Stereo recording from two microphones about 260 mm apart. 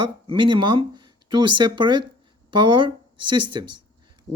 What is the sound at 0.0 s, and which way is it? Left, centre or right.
Speech, centre.